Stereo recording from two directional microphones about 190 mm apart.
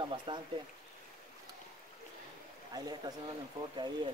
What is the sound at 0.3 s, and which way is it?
Speech, 25° right (ahead or behind).